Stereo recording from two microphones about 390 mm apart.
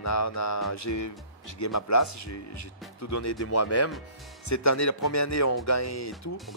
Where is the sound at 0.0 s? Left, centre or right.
Left.